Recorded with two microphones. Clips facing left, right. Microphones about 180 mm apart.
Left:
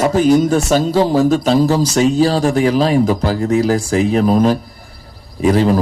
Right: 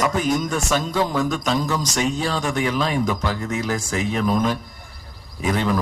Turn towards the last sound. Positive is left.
turn(degrees=35)  # may be behind; listen again after turning